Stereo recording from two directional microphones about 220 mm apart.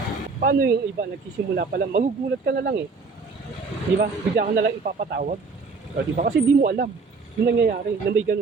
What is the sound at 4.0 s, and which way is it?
Speech, 45° right (ahead or behind).